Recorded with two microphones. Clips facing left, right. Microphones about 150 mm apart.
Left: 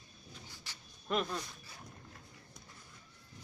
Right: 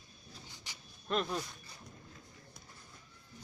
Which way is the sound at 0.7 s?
15° right (ahead or behind).